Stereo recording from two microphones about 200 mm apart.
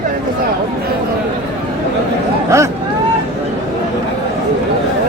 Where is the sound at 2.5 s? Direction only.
15° right (ahead or behind).